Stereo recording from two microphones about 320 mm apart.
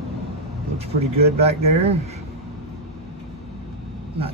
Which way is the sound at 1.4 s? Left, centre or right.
Centre.